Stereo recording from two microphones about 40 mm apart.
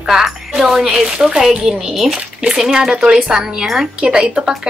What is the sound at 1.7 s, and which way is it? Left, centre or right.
Speech, centre.